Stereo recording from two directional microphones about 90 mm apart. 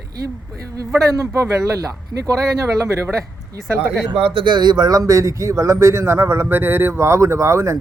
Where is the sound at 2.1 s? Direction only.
40° right (ahead or behind).